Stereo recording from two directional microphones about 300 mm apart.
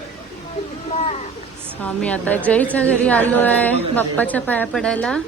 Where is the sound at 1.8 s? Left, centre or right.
Centre.